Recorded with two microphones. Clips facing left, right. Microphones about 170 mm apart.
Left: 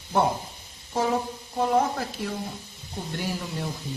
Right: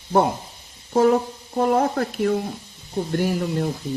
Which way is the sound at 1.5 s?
55° right (ahead or behind).